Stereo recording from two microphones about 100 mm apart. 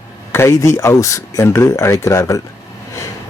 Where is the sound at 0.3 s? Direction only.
25° left (ahead or behind).